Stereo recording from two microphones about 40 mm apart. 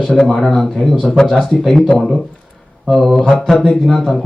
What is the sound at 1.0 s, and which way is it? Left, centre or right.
Speech, centre.